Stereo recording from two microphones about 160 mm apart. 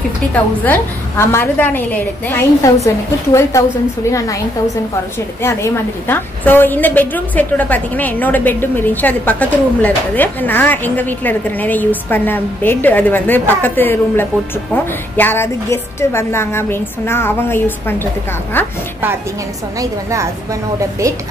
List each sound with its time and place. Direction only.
0.3 s a woman's voice: 15° left (ahead or behind)
5.4 s a woman's voice: 15° left (ahead or behind)
19.8 s a woman's voice: 20° right (ahead or behind)